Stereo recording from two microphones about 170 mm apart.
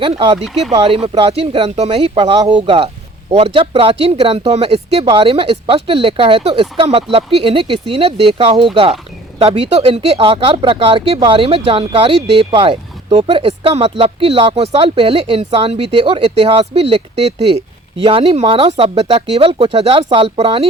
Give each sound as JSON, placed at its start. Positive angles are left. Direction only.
{"t": 0.0, "sound": "speech", "side_deg": -30}
{"t": 0.3, "sound": "speech", "side_deg": 0}
{"t": 1.0, "sound": "speech", "side_deg": -30}